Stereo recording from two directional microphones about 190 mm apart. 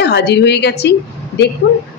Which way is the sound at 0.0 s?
60° left (ahead or behind).